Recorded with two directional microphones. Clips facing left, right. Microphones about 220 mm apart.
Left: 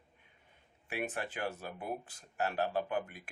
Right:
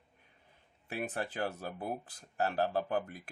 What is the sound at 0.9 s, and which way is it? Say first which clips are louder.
Speech: right 1 dB; 35° right (ahead or behind).